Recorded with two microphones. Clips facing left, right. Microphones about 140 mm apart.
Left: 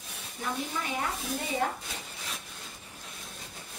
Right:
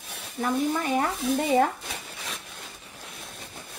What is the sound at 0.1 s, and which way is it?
Speech, 70° right (ahead or behind).